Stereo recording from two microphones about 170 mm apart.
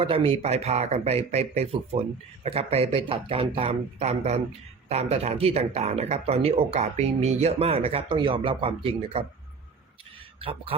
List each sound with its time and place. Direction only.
0.0 s speech: 35° right (ahead or behind)
10.4 s speech: 35° right (ahead or behind)